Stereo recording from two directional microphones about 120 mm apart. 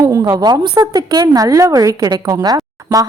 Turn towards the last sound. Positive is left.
turn(degrees=-30)  # may be behind; listen again after turning